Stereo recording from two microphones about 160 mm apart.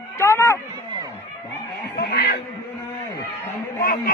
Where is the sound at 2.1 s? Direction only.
80° left.